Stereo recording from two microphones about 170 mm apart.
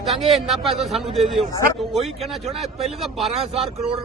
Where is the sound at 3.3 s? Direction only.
35° right (ahead or behind).